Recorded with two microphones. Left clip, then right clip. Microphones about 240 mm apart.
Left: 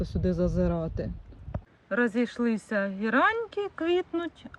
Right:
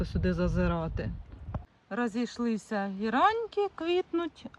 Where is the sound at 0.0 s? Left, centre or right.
Centre.